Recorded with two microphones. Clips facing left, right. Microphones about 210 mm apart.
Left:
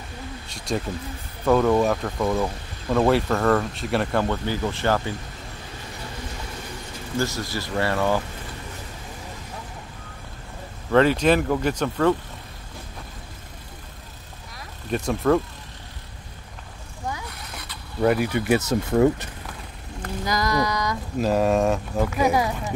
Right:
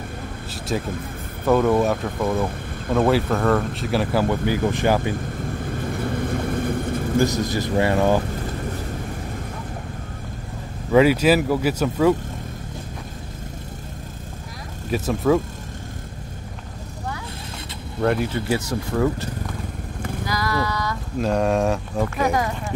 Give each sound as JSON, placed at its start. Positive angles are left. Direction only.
{"t": 0.5, "sound": "speech", "side_deg": -5}
{"t": 5.5, "sound": "vehicle", "side_deg": -55}
{"t": 7.2, "sound": "speech", "side_deg": -20}
{"t": 10.9, "sound": "speech", "side_deg": -10}
{"t": 14.9, "sound": "speech", "side_deg": -5}
{"t": 18.0, "sound": "speech", "side_deg": 5}
{"t": 18.5, "sound": "speech", "side_deg": 20}
{"t": 20.2, "sound": "a sound", "side_deg": 20}
{"t": 21.2, "sound": "speech", "side_deg": 5}